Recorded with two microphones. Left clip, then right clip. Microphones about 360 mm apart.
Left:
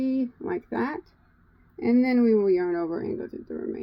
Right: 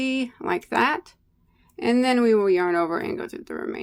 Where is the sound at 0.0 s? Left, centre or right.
Centre.